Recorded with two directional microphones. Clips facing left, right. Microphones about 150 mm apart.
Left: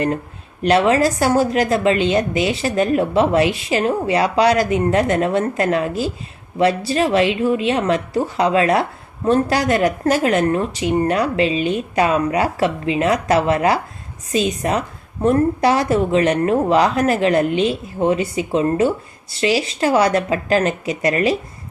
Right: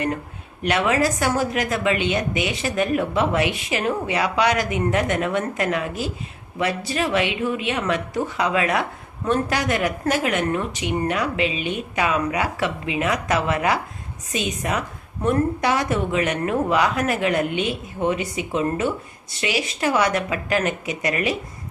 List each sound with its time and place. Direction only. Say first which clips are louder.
0.6 s speech: left 6 dB; 35° left (ahead or behind)